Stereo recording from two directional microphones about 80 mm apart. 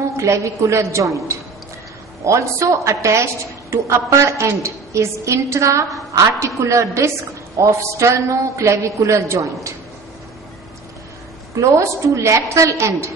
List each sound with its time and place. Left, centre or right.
0.2 s a man's voice: right
11.6 s a man's voice: right